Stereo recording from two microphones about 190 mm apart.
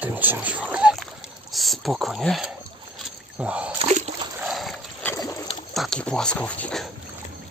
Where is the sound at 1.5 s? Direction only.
Centre (ahead or behind).